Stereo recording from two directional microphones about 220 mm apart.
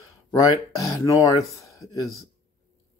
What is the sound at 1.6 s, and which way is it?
Speech, 15° left (ahead or behind).